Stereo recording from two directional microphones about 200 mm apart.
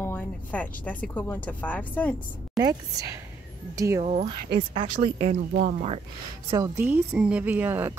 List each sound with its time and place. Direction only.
0.0 s speech: 10° left (ahead or behind)
2.5 s speech: 20° right (ahead or behind)
4.0 s speech: 30° right (ahead or behind)
6.5 s speech: 10° right (ahead or behind)